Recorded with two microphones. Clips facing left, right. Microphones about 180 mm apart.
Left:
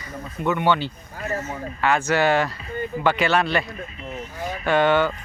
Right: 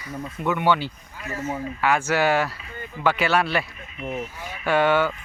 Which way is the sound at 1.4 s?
10° right (ahead or behind).